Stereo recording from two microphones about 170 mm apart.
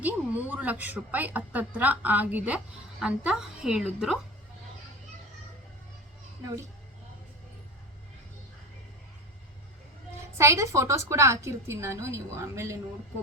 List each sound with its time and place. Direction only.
0.0 s a woman's voice: 10° right (ahead or behind)
6.4 s a child's voice: 20° right (ahead or behind)
10.3 s a woman's voice: 15° right (ahead or behind)